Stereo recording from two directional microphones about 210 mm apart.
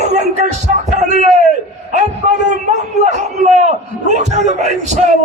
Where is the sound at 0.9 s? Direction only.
35° right (ahead or behind).